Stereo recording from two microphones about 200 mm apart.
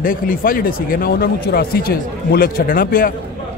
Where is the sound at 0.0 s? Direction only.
45° left (ahead or behind).